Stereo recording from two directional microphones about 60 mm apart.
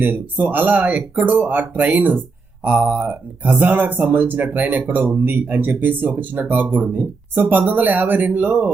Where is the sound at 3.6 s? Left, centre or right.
Right.